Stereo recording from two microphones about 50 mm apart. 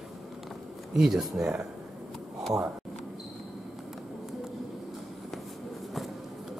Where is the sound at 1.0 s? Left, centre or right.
Centre.